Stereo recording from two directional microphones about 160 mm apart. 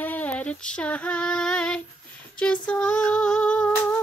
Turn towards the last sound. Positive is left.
turn(degrees=5)  # may be behind; listen again after turning